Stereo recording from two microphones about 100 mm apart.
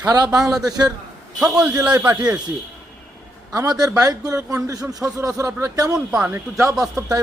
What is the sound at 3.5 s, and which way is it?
Speech, 40° right (ahead or behind).